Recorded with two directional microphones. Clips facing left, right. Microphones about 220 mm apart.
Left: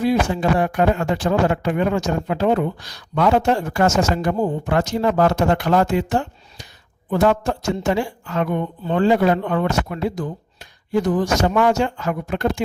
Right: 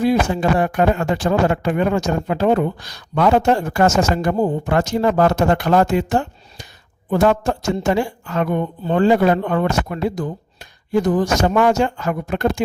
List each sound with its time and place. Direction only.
0.0 s a man's voice: 45° right (ahead or behind)